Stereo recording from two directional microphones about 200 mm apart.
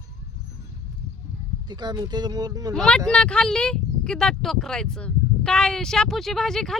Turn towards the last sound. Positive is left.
turn(degrees=0)  # may be behind; listen again after turning